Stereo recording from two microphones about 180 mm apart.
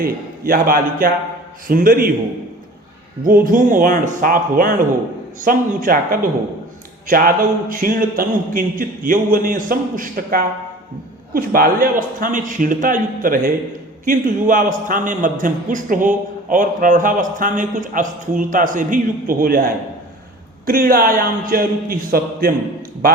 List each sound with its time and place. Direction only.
0.0 s a man's voice: 55° right (ahead or behind)
3.2 s a man's voice: 50° right (ahead or behind)